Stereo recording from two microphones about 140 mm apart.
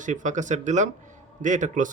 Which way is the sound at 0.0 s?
60° right (ahead or behind).